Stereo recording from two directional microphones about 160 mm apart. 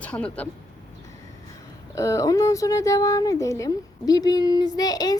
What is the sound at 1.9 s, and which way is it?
A woman's voice, 20° left (ahead or behind).